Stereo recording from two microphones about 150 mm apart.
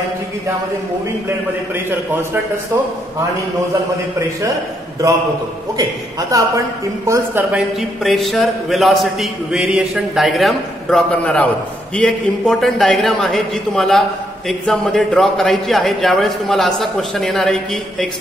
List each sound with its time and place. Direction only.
5.8 s a man's voice: 25° right (ahead or behind)
8.0 s a man's voice: centre (ahead or behind)